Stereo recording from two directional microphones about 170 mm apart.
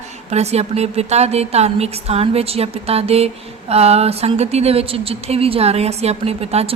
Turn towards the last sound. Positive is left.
turn(degrees=-35)  # may be behind; listen again after turning